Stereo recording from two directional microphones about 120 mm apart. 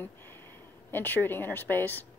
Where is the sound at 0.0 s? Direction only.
20° left (ahead or behind).